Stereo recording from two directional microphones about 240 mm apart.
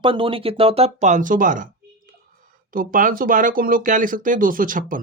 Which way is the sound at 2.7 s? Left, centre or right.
Right.